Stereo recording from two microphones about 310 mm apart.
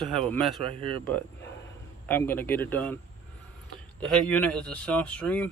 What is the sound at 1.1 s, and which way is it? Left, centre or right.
A man's voice, centre.